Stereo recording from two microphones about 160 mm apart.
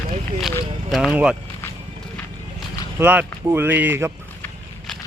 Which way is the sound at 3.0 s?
15° right (ahead or behind).